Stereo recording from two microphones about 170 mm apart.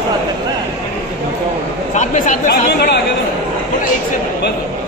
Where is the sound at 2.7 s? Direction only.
75° left (ahead or behind).